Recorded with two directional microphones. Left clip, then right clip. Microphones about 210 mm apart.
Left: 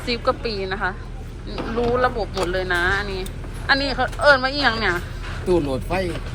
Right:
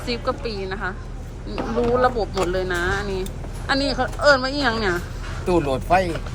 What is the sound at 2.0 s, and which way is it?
A woman's voice, 20° right (ahead or behind).